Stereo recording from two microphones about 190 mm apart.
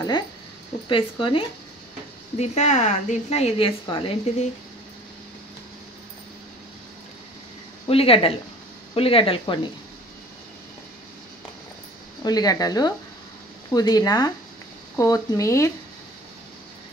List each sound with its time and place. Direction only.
0.8 s a woman's voice: 25° left (ahead or behind)
7.8 s a woman's voice: 30° left (ahead or behind)
12.2 s speech: 20° left (ahead or behind)